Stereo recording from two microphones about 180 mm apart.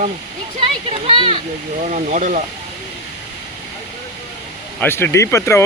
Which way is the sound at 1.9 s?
45° right (ahead or behind).